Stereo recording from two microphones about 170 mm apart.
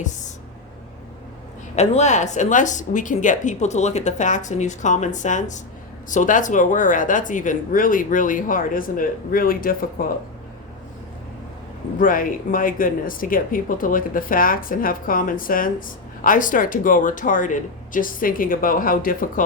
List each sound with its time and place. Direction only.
1.7 s speech: 40° left (ahead or behind); by 10.1 s 55° left (ahead or behind)
11.9 s speech: 55° left (ahead or behind)